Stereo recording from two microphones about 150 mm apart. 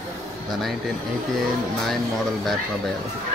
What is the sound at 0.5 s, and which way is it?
Speech, centre (ahead or behind).